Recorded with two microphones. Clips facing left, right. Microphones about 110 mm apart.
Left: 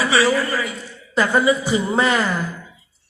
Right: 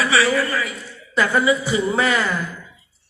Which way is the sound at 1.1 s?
30° left (ahead or behind).